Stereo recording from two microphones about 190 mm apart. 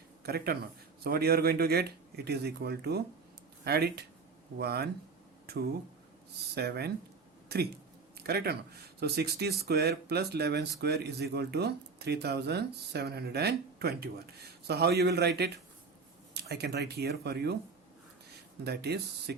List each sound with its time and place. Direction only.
0.2 s speech: 55° right (ahead or behind)
6.5 s speech: 60° right (ahead or behind)
7.4 s a sound: 55° right (ahead or behind)
8.3 s speech: 55° right (ahead or behind)
18.6 s speech: 60° right (ahead or behind)